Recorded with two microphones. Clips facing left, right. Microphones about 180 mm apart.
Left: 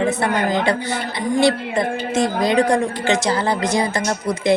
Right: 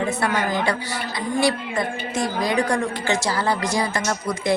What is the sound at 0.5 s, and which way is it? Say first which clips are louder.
A man's voice: left 4 dB; 20° left (ahead or behind).